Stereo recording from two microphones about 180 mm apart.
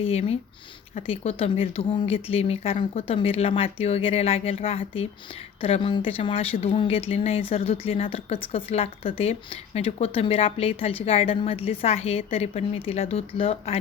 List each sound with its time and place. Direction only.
0.0 s speech: 35° left (ahead or behind)